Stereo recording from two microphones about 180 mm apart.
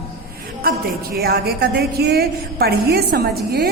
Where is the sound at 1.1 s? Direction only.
55° right (ahead or behind).